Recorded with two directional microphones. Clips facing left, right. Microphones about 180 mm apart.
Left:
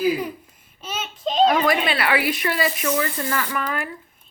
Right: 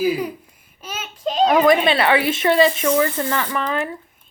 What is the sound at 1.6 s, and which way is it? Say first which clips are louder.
Speech: right 6 dB; 20° right (ahead or behind).